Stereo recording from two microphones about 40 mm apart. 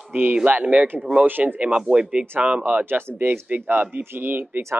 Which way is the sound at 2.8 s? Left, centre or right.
Right.